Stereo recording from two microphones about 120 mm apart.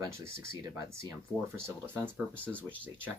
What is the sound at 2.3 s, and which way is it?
Speech, 10° left (ahead or behind).